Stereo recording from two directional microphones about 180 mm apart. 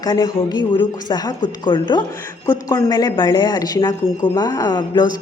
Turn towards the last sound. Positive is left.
turn(degrees=25)  # may be behind; listen again after turning